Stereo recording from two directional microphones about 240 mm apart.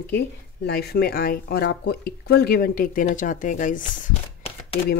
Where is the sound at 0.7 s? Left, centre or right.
Left.